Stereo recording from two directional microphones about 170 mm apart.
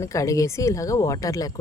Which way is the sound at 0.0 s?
20° left (ahead or behind).